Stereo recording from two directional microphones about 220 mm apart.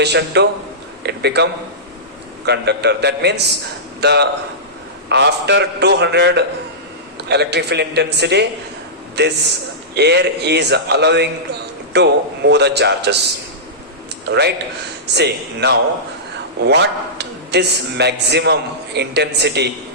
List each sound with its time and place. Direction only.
0.0 s a man's voice: 50° right (ahead or behind)
2.5 s a man's voice: 50° right (ahead or behind)
14.3 s a man's voice: 50° right (ahead or behind)